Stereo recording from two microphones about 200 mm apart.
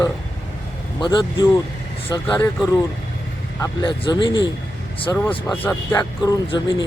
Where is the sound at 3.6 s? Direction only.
20° left (ahead or behind).